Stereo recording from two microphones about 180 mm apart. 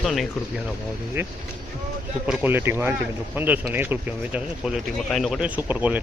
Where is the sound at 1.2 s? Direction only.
10° right (ahead or behind).